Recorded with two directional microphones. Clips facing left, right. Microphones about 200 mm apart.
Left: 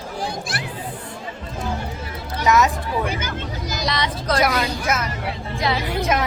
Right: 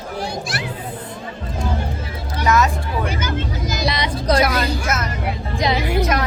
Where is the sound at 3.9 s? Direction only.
15° right (ahead or behind).